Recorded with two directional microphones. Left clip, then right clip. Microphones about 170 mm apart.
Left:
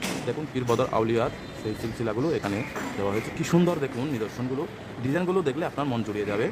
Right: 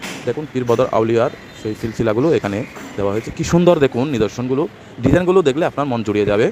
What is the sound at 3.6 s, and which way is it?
Speech, 40° right (ahead or behind).